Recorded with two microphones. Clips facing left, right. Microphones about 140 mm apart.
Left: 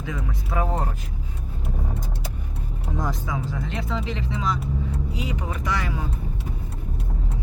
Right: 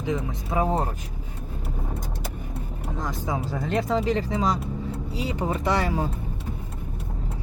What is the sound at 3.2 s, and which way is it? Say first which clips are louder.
Speech: right 2 dB; 35° right (ahead or behind).